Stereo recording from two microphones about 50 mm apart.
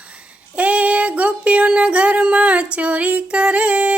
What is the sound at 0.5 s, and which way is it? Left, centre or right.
Female singing, right.